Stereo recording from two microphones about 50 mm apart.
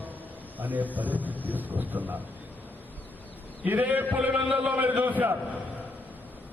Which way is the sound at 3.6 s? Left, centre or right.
Right.